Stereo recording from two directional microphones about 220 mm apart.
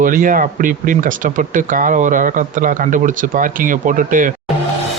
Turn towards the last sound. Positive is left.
turn(degrees=-35)  # may be behind; listen again after turning